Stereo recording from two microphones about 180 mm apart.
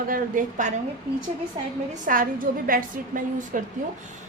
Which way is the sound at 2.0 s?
50° right (ahead or behind).